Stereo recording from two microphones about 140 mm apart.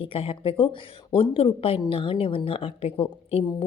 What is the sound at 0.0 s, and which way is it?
A woman's voice, 40° left (ahead or behind).